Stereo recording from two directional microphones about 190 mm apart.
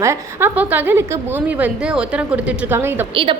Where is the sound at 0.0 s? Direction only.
15° right (ahead or behind).